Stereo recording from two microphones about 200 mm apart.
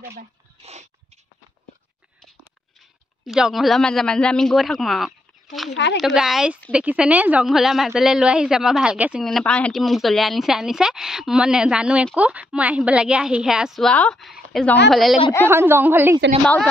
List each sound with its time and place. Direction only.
0.0 s speech: 50° right (ahead or behind)
0.6 s a sound: 35° right (ahead or behind)
3.3 s a woman's voice: centre (ahead or behind)
5.7 s speech: 60° left (ahead or behind)
5.9 s a woman's voice: centre (ahead or behind)
15.4 s a woman's voice: 10° right (ahead or behind)